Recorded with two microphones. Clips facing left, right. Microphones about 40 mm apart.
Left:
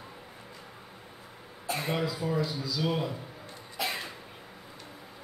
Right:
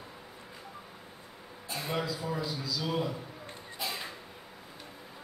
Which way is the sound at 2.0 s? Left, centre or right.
Centre.